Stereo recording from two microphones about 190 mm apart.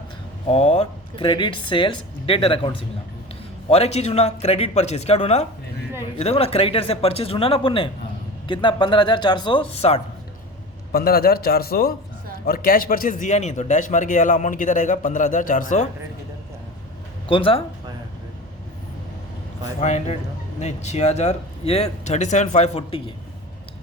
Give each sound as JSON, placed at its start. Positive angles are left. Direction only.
{"t": 0.5, "sound": "speech", "side_deg": 35}
{"t": 3.7, "sound": "speech", "side_deg": 35}
{"t": 10.9, "sound": "a man's voice", "side_deg": 55}
{"t": 17.2, "sound": "speech", "side_deg": 25}
{"t": 19.8, "sound": "speech", "side_deg": 35}